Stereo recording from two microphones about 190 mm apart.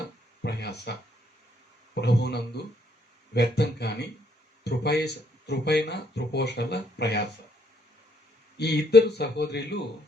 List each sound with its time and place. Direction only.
0.4 s a sound: 60° left (ahead or behind)
2.0 s speech: 60° left (ahead or behind)
8.5 s speech: 60° left (ahead or behind)